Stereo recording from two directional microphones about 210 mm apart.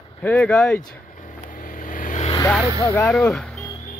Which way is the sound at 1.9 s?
40° left (ahead or behind).